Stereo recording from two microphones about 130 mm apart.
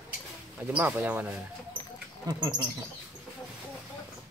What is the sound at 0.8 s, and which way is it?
Speech, 15° right (ahead or behind).